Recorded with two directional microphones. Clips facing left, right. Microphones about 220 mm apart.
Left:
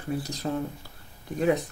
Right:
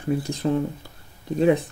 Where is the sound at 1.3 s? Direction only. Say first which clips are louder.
Right 5 dB; 25° right (ahead or behind).